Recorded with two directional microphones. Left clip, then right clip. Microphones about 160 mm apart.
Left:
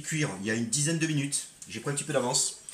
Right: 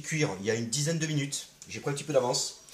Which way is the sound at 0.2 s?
35° right (ahead or behind).